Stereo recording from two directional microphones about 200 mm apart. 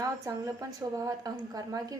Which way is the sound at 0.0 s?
15° right (ahead or behind).